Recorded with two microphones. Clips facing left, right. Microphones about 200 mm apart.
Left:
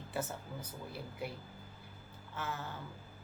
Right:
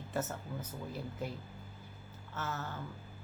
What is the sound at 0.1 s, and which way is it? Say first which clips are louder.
Speech: right 2 dB; 10° left (ahead or behind).